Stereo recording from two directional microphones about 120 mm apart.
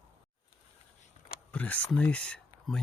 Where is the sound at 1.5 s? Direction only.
15° left (ahead or behind).